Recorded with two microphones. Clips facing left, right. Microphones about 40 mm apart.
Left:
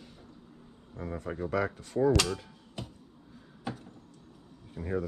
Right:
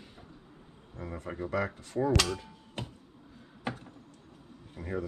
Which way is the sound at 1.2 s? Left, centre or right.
Centre.